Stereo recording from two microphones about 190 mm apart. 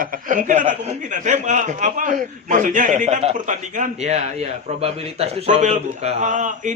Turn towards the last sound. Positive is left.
turn(degrees=-40)  # may be behind; listen again after turning